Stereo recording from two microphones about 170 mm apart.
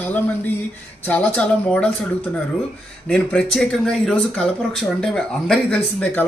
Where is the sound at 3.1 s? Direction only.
5° left (ahead or behind).